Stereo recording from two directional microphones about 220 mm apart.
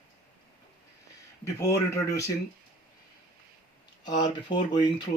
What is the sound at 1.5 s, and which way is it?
Speech, 10° left (ahead or behind).